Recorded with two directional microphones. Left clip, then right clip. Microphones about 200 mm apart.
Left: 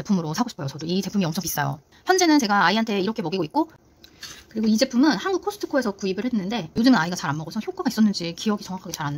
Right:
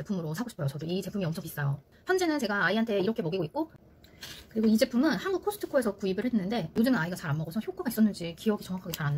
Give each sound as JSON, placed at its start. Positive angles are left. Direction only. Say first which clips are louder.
{"t": 0.0, "sound": "speech", "louder": "left 10 dB", "side_deg": 40}
{"t": 4.6, "sound": "speech", "louder": "left 6 dB", "side_deg": 40}